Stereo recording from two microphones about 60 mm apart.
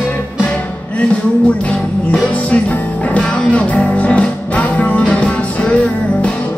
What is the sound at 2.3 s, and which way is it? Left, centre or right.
Music, left.